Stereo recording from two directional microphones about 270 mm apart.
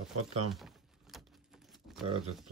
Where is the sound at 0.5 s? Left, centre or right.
Centre.